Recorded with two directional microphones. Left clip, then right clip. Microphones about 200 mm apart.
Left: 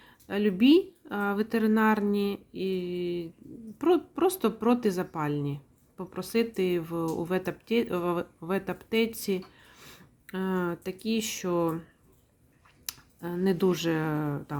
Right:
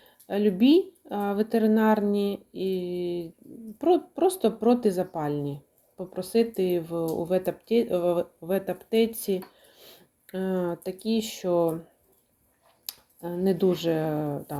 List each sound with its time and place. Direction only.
0.0 s speech: 25° left (ahead or behind)
12.8 s speech: 25° left (ahead or behind)